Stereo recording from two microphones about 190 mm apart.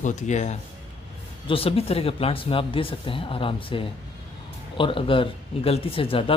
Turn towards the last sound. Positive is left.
turn(degrees=30)  # may be behind; listen again after turning